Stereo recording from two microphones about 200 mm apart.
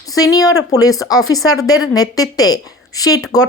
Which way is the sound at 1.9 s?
20° left (ahead or behind).